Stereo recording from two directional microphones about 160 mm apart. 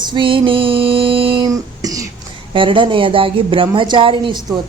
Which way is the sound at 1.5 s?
20° right (ahead or behind).